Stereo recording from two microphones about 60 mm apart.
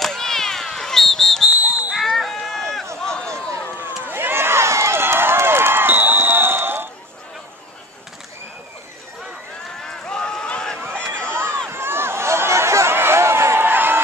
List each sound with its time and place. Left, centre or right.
0.0 s a sound: centre
2.0 s run: centre
3.3 s run: right
3.7 s run: right
9.8 s run: centre
11.1 s a sound: right